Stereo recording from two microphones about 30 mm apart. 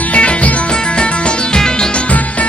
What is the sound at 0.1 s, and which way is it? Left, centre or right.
Music, left.